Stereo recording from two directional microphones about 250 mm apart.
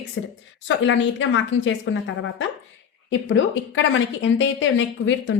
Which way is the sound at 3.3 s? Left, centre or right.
Left.